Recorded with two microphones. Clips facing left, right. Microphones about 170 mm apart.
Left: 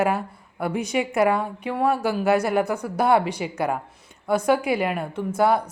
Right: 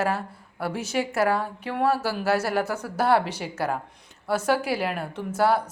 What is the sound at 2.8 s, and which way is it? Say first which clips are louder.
Speech: left 2 dB; 15° left (ahead or behind).